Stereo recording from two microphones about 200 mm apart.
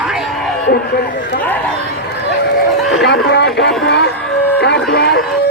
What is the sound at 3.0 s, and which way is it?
Speech, 60° left (ahead or behind).